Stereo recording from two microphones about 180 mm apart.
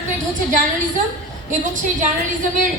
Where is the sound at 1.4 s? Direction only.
45° right (ahead or behind).